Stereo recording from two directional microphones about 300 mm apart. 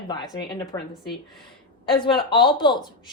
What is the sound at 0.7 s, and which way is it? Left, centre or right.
A woman's voice, centre.